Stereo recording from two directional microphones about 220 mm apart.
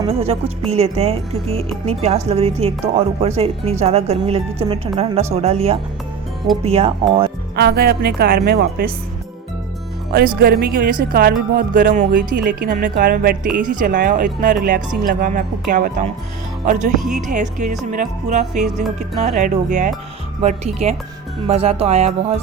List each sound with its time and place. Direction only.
0.0 s speech: 25° right (ahead or behind)
7.5 s speech: 45° right (ahead or behind)
10.1 s speech: 45° right (ahead or behind)